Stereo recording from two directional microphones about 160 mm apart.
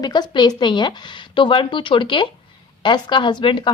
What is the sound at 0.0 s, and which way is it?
A woman's voice, 25° left (ahead or behind).